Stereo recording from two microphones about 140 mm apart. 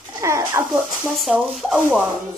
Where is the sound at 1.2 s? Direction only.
Centre (ahead or behind).